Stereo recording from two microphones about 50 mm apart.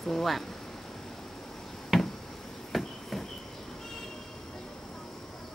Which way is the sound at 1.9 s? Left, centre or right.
Centre.